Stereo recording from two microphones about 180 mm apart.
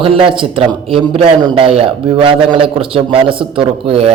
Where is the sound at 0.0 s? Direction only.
30° right (ahead or behind).